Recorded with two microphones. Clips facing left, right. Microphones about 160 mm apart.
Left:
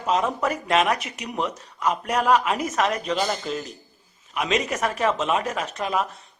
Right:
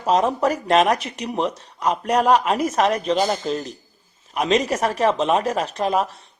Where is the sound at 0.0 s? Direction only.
35° right (ahead or behind).